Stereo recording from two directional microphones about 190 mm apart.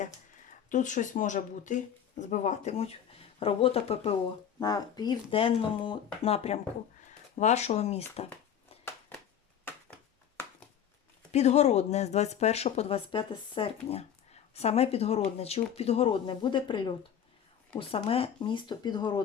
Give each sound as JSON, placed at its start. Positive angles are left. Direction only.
{"t": 0.7, "sound": "speech", "side_deg": 40}
{"t": 4.6, "sound": "speech", "side_deg": 20}
{"t": 8.8, "sound": "a sound", "side_deg": 15}
{"t": 11.3, "sound": "speech", "side_deg": 35}